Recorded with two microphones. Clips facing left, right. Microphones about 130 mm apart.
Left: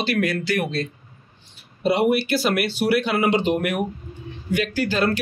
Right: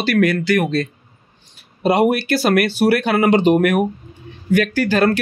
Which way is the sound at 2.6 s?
65° right (ahead or behind).